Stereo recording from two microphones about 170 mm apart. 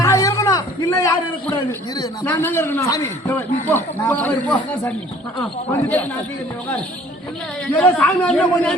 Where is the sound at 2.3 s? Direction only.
10° left (ahead or behind).